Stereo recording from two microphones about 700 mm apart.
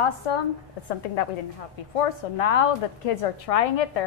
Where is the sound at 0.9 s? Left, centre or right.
Left.